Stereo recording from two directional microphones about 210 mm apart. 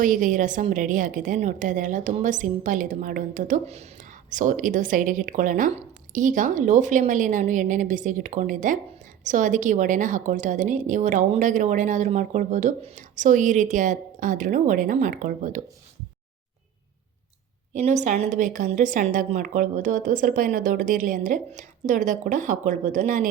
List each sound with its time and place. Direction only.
0.0 s a woman's voice: 40° right (ahead or behind)
17.7 s a woman's voice: 35° right (ahead or behind)